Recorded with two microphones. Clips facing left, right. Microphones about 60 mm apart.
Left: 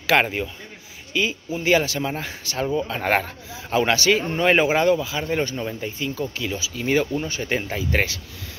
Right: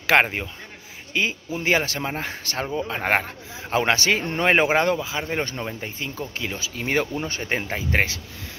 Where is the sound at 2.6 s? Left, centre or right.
Right.